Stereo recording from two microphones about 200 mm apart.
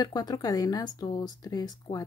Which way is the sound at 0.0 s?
20° left (ahead or behind).